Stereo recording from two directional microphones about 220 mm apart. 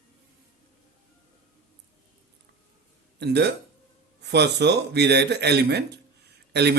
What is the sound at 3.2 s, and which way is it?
A man's voice, 50° right (ahead or behind).